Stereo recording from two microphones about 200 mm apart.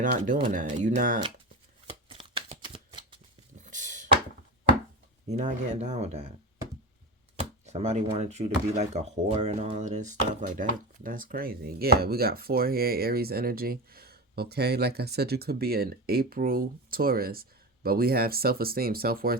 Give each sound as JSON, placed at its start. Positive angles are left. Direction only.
{"t": 0.0, "sound": "speech", "side_deg": -40}
{"t": 1.9, "sound": "shuffling cards", "side_deg": -25}
{"t": 3.7, "sound": "a sound", "side_deg": -40}
{"t": 5.3, "sound": "speech", "side_deg": -35}
{"t": 7.3, "sound": "speech", "side_deg": -35}